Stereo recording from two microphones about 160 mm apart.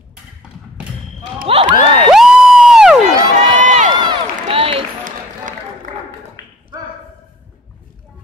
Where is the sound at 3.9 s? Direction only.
30° right (ahead or behind).